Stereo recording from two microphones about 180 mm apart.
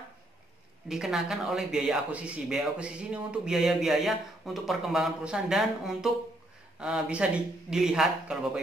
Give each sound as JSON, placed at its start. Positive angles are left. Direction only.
{"t": 0.8, "sound": "speech", "side_deg": 0}